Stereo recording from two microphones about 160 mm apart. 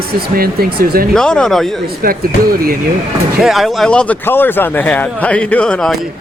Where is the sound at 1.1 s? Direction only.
5° left (ahead or behind).